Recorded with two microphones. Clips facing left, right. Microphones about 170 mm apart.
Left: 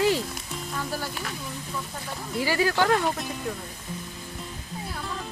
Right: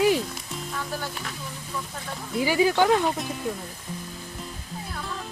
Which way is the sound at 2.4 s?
15° right (ahead or behind).